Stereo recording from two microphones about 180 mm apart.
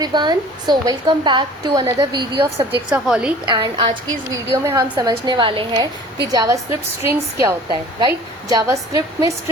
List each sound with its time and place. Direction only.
0.0 s a woman's voice: 25° right (ahead or behind)
2.9 s a woman's voice: 5° right (ahead or behind)
3.4 s a woman's voice: 25° right (ahead or behind)